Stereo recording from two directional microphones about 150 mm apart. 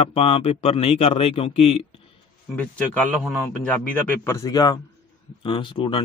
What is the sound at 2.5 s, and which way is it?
A man's voice, 10° left (ahead or behind).